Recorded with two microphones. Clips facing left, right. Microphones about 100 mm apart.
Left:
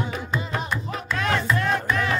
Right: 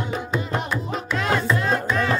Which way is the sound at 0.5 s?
15° right (ahead or behind).